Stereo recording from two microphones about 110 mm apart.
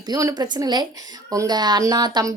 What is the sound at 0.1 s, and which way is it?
A woman's voice, 35° right (ahead or behind).